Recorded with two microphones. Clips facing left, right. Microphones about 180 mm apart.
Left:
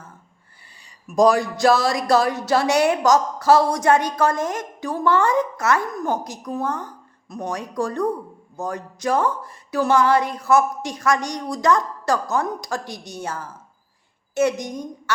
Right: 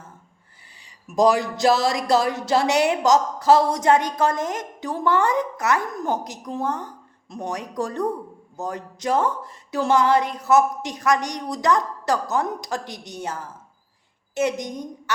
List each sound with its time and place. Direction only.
1.0 s a woman's voice: 20° right (ahead or behind)